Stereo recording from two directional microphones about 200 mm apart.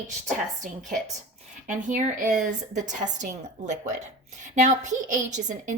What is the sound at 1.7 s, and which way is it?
A woman's voice, 40° right (ahead or behind).